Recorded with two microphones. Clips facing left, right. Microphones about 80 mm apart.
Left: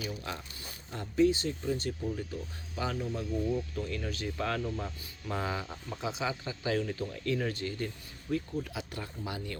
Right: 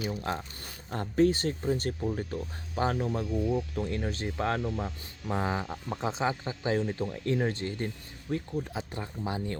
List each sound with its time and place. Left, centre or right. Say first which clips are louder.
0.1 s speech: right 6 dB; right
0.6 s speech: right 5 dB; right
3.8 s speech: right 4 dB; right
4.6 s speech: right 3 dB; right